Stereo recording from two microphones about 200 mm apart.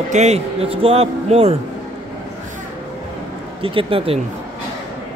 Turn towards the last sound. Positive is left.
turn(degrees=-30)  # may be behind; listen again after turning